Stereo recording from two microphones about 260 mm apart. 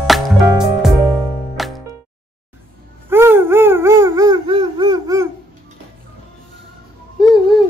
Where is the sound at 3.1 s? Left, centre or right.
Centre.